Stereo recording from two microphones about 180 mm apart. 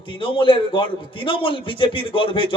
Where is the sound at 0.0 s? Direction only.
30° left (ahead or behind).